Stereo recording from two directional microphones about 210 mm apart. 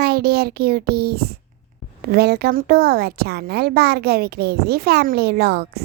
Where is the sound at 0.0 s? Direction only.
50° right (ahead or behind).